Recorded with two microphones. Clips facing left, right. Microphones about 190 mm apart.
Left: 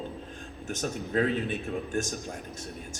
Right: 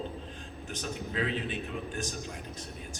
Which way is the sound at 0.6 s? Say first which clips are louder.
Left 5 dB; 45° left (ahead or behind).